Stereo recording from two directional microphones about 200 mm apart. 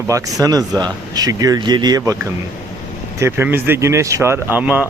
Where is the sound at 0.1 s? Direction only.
15° right (ahead or behind).